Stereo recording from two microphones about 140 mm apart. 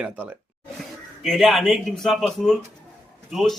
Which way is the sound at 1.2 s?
Centre (ahead or behind).